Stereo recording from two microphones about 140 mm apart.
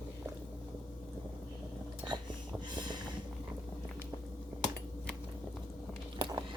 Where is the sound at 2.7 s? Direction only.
35° right (ahead or behind).